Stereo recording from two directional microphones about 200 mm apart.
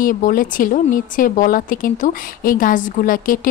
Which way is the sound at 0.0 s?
40° left (ahead or behind).